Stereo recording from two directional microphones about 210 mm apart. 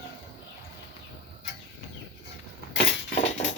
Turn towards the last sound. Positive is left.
turn(degrees=30)  # may be behind; listen again after turning